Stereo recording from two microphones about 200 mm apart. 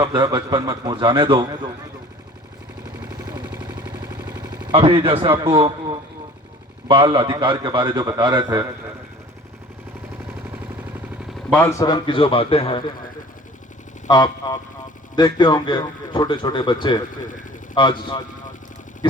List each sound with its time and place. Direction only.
0.0 s a man's voice: 20° right (ahead or behind)
3.0 s a sound: 15° right (ahead or behind)
5.4 s a man's voice: 25° right (ahead or behind)
11.5 s speech: 10° left (ahead or behind); by 12.8 s 30° left (ahead or behind)
14.1 s speech: 20° left (ahead or behind)